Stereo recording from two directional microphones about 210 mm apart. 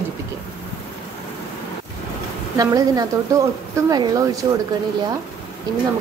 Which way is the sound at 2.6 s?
15° right (ahead or behind).